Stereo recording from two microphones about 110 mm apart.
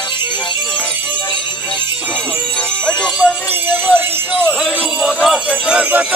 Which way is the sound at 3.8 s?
15° right (ahead or behind).